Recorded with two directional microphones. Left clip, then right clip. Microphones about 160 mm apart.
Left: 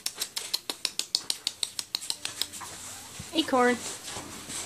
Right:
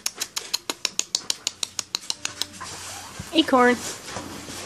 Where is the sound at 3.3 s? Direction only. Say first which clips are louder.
Right 6 dB; centre (ahead or behind).